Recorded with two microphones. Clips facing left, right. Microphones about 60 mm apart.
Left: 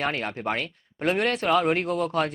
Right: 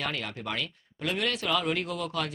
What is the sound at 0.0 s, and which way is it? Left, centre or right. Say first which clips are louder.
Speech: left 6 dB; left.